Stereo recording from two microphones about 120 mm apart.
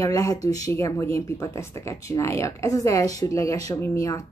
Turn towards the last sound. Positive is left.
turn(degrees=25)  # may be behind; listen again after turning